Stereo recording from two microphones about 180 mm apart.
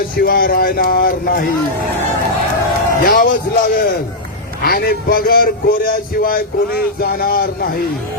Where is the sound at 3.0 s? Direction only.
55° left (ahead or behind).